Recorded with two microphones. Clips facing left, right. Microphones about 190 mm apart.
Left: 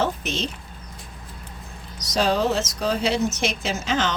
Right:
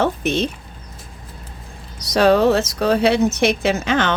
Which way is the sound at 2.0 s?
60° right (ahead or behind).